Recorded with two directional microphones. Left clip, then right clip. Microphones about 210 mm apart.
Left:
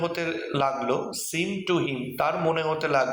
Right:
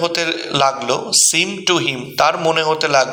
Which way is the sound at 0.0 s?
45° right (ahead or behind).